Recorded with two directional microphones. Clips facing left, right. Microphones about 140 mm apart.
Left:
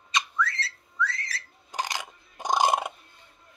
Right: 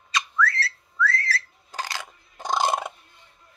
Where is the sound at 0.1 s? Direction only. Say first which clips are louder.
Right 3 dB; 20° left (ahead or behind).